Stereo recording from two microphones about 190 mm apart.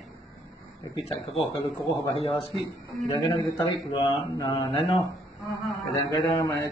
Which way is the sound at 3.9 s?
30° left (ahead or behind).